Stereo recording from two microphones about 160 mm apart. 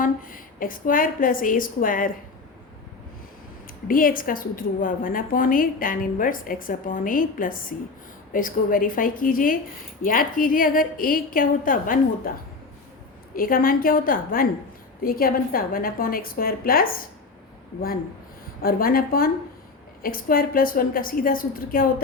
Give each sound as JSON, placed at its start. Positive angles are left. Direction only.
{"t": 0.0, "sound": "a woman's voice", "side_deg": 60}
{"t": 3.8, "sound": "a woman's voice", "side_deg": 60}
{"t": 13.3, "sound": "a woman's voice", "side_deg": 65}
{"t": 18.6, "sound": "a woman's voice", "side_deg": 65}